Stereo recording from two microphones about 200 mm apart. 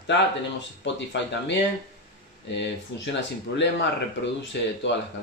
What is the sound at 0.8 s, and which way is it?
Speech, 65° left (ahead or behind).